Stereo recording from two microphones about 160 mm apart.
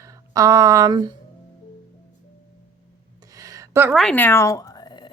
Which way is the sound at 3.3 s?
20° right (ahead or behind).